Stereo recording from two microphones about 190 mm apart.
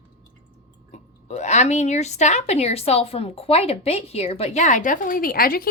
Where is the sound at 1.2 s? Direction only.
35° left (ahead or behind).